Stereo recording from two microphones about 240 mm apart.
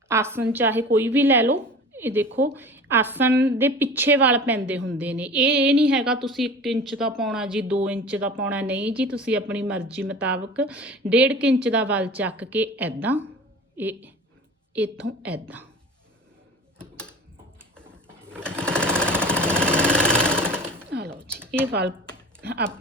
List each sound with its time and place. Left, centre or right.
0.1 s a woman's voice: centre
5.5 s speech: right
5.9 s a woman's voice: centre
15.2 s a woman's voice: centre
16.8 s a sound: centre
18.3 s sewing machine: centre
21.1 s a sound: centre
22.4 s typing: right